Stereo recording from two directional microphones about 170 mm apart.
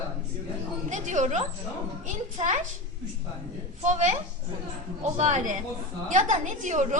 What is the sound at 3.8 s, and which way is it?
Speech, 45° right (ahead or behind).